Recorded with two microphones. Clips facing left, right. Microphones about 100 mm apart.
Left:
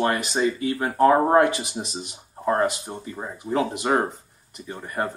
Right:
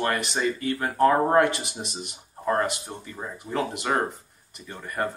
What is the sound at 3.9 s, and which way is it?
Speech, 20° left (ahead or behind).